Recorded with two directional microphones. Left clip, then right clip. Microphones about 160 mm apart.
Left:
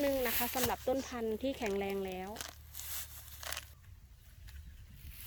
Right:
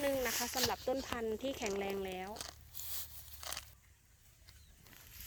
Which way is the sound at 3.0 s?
5° left (ahead or behind).